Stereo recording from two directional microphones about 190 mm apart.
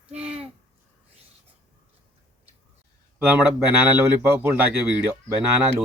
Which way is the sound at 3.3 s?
10° right (ahead or behind).